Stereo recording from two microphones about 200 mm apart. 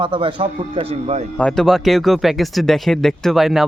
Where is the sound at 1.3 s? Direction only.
5° left (ahead or behind).